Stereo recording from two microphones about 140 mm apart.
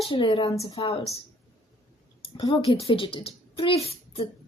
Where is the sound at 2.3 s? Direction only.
40° left (ahead or behind).